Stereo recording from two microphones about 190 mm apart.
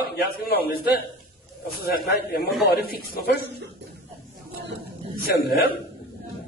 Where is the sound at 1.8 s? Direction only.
50° left (ahead or behind).